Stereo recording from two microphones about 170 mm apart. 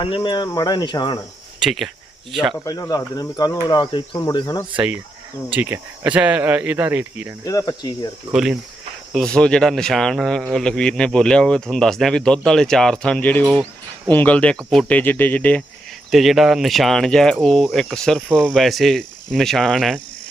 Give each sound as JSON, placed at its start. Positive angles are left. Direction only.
{"t": 0.0, "sound": "speech", "side_deg": 30}
{"t": 1.5, "sound": "speech", "side_deg": 0}
{"t": 2.6, "sound": "speech", "side_deg": 20}
{"t": 5.5, "sound": "speech", "side_deg": -10}
{"t": 7.4, "sound": "speech", "side_deg": 20}
{"t": 8.3, "sound": "speech", "side_deg": -5}